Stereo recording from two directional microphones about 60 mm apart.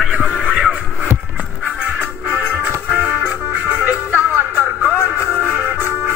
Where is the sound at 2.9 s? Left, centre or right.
Centre.